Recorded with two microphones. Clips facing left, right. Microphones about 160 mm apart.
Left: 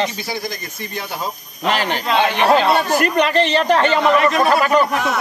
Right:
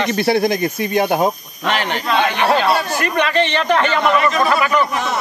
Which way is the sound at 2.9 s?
40° left (ahead or behind).